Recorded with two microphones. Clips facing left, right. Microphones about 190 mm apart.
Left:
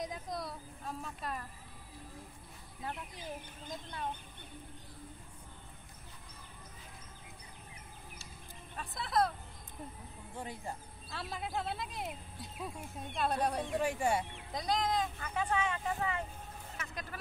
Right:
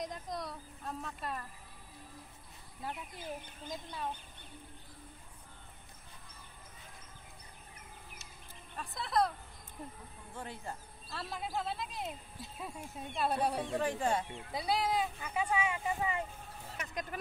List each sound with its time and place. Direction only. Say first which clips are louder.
0.0 s a woman's voice: even; centre (ahead or behind)
3.7 s speech: even; centre (ahead or behind)
8.7 s speech: even; centre (ahead or behind)
10.3 s speech: left 1 dB; 15° left (ahead or behind)
11.1 s speech: even; centre (ahead or behind)
13.7 s speech: even; 10° left (ahead or behind)
14.5 s speech: even; 5° right (ahead or behind)